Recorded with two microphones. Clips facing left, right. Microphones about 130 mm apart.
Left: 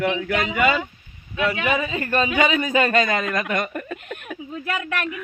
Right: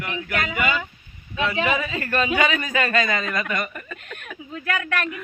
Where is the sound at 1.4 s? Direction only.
30° right (ahead or behind).